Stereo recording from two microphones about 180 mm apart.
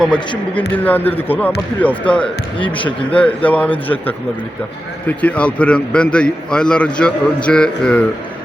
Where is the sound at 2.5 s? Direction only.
30° left (ahead or behind).